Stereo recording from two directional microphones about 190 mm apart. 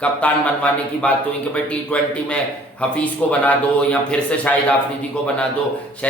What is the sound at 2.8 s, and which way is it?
A man's voice, 5° left (ahead or behind).